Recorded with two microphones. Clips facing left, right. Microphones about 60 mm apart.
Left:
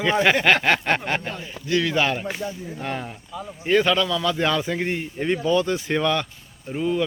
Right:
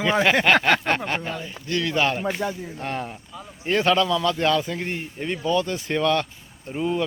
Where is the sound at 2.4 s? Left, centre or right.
Right.